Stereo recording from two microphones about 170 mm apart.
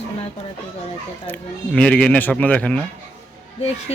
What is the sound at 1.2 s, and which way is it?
Speech, 10° left (ahead or behind).